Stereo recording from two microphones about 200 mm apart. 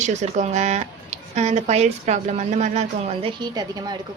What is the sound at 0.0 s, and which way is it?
Speech, 35° right (ahead or behind).